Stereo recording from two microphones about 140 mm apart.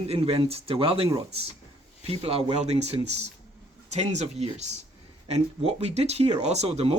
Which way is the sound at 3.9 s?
55° right (ahead or behind).